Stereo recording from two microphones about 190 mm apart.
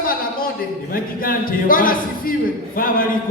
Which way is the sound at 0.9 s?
50° left (ahead or behind).